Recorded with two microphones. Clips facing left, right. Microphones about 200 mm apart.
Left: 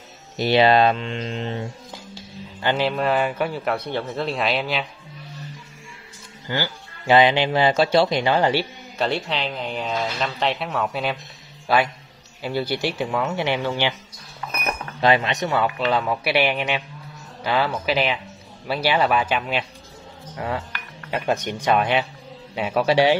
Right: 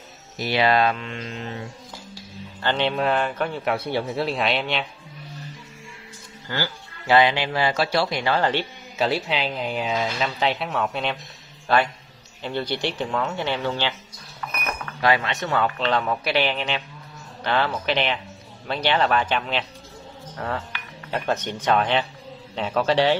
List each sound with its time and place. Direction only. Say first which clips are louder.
0.4 s speech: left 4 dB; 25° left (ahead or behind)
2.6 s speech: left 1 dB; 5° left (ahead or behind)
3.7 s speech: right 1 dB; 10° right (ahead or behind)
6.5 s speech: left 2 dB; 15° left (ahead or behind)
8.9 s a man's voice: right 1 dB; centre (ahead or behind)